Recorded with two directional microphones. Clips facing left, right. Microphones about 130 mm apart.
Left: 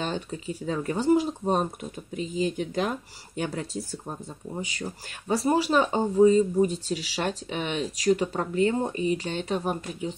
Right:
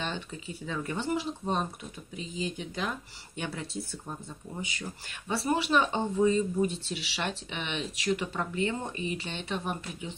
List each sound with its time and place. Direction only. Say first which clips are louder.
0.0 s speech: left 5 dB; 40° left (ahead or behind)